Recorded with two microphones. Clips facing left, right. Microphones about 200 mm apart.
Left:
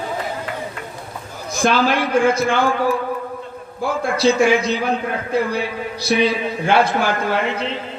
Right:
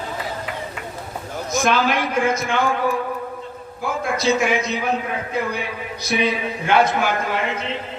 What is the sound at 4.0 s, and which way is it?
A man's voice, 30° left (ahead or behind).